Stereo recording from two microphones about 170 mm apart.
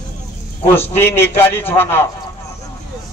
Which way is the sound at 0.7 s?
15° left (ahead or behind).